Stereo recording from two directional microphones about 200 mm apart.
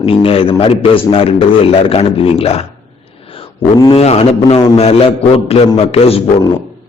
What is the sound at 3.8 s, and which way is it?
A man's voice, 30° left (ahead or behind).